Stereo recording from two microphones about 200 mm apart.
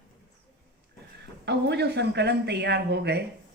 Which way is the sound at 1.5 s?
55° right (ahead or behind).